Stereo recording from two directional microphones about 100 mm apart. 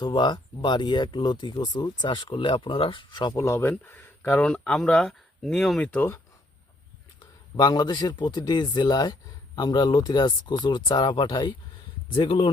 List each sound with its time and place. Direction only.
0.0 s speech: 50° left (ahead or behind)
3.3 s speech: 25° left (ahead or behind); by 5.9 s 5° left (ahead or behind)
5.9 s speech: 20° left (ahead or behind)
7.2 s speech: 45° left (ahead or behind)